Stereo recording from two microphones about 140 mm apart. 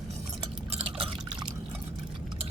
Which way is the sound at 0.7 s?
40° right (ahead or behind).